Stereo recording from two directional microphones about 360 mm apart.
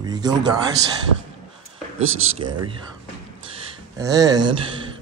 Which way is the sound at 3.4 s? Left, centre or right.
Centre.